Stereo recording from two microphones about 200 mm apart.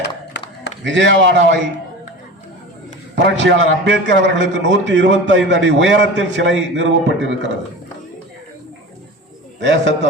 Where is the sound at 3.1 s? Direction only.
60° right (ahead or behind).